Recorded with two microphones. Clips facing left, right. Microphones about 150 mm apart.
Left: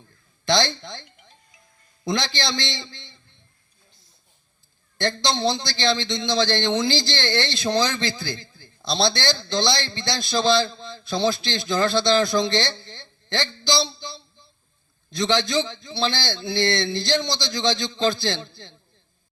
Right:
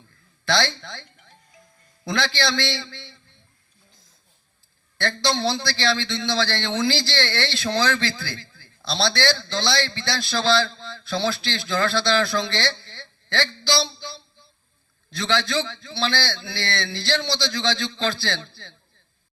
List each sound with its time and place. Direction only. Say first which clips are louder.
0.4 s a man's voice: left 2 dB; 20° left (ahead or behind)
4.9 s a man's voice: even; 20° left (ahead or behind)